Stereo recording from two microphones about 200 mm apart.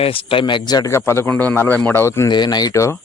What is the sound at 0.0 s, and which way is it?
A man's voice, 25° left (ahead or behind).